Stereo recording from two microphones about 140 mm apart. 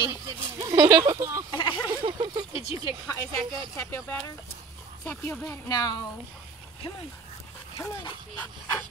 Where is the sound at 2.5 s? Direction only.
45° left (ahead or behind).